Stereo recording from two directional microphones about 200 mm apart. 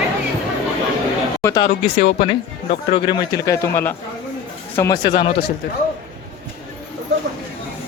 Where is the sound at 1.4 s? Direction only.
20° left (ahead or behind).